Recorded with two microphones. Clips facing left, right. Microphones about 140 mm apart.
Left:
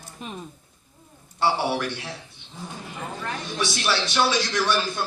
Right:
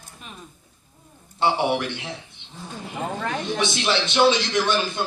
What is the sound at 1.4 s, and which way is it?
A man's voice, 20° right (ahead or behind).